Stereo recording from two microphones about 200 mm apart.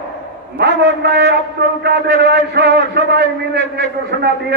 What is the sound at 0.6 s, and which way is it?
A man's voice, 55° right (ahead or behind).